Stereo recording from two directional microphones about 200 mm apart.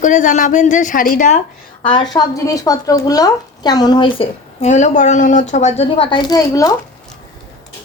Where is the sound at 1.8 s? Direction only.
25° left (ahead or behind).